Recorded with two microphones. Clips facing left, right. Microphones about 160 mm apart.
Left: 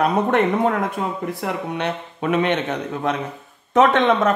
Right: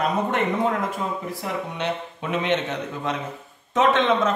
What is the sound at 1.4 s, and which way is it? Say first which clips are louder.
A man's voice: left 3 dB; 60° left (ahead or behind).